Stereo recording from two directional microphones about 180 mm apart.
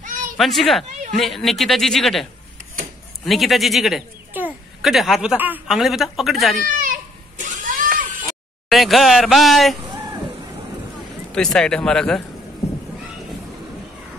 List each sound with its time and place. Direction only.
0.0 s a sound: 45° right (ahead or behind)
0.4 s speech: centre (ahead or behind)
3.3 s speech: centre (ahead or behind)
6.7 s a sound: 45° right (ahead or behind)
8.6 s speech: centre (ahead or behind)
11.3 s speech: 5° left (ahead or behind)